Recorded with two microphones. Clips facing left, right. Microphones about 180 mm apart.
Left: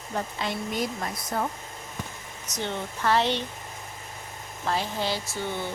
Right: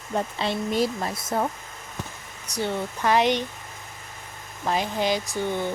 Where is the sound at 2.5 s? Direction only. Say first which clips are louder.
Right 4 dB; 10° right (ahead or behind).